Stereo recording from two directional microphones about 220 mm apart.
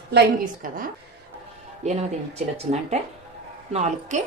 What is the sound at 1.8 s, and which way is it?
A woman's voice, 30° right (ahead or behind).